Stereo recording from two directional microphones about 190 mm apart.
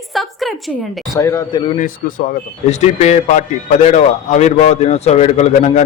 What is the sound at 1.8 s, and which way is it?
A man's voice, 45° left (ahead or behind).